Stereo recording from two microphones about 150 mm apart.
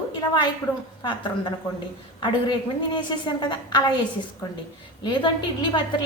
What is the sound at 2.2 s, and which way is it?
A woman's voice, 30° left (ahead or behind).